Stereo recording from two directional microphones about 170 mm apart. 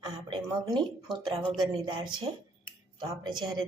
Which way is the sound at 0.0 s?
25° right (ahead or behind).